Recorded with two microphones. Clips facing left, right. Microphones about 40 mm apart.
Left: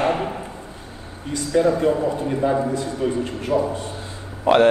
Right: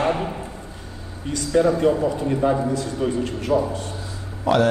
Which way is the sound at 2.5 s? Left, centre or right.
Centre.